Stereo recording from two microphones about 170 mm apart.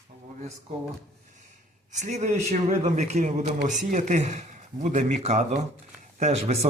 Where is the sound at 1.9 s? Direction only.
45° right (ahead or behind).